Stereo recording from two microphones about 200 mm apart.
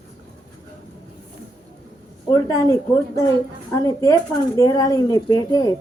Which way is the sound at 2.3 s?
15° left (ahead or behind).